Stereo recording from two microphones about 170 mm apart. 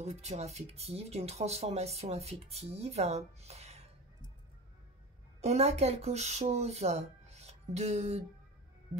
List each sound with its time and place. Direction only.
0.0 s speech: 40° right (ahead or behind)
5.4 s speech: 40° right (ahead or behind)